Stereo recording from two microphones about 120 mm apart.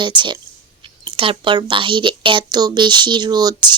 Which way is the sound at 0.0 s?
40° right (ahead or behind).